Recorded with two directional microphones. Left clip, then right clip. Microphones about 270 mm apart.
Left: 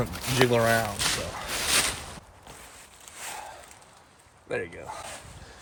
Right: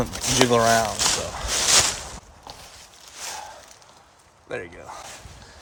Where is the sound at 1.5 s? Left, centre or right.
Right.